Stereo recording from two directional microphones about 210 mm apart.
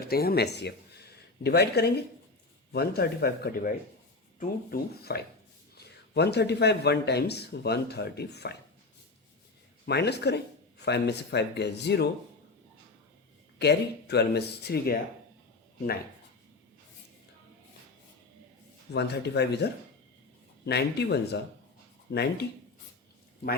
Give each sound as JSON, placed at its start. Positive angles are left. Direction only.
{"t": 0.0, "sound": "speech", "side_deg": 45}
{"t": 9.8, "sound": "speech", "side_deg": 50}
{"t": 13.6, "sound": "speech", "side_deg": 50}
{"t": 18.9, "sound": "speech", "side_deg": 50}
{"t": 20.7, "sound": "speech", "side_deg": 50}